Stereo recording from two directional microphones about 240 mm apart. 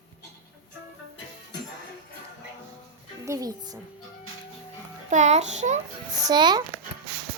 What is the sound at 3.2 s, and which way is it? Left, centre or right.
Speech, centre.